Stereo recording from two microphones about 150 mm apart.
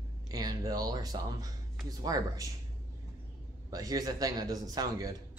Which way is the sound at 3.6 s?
25° right (ahead or behind).